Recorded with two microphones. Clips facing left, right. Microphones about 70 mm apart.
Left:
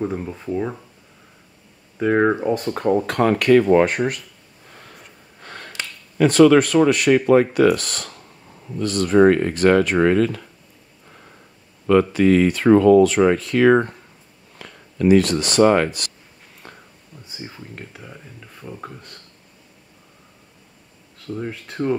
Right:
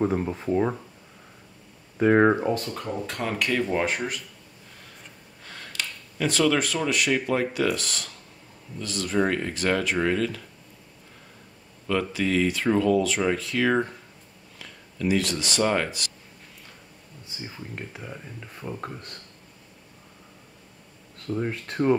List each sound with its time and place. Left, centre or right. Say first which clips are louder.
0.0 s speech: right 1 dB; centre
2.0 s speech: left 1 dB; centre
2.7 s speech: left 12 dB; left
3.8 s speech: left 7 dB; left
5.4 s a sound: left 6 dB; left
6.1 s speech: left 11 dB; left
11.9 s speech: left 10 dB; left
17.6 s speech: even; centre
21.3 s speech: even; centre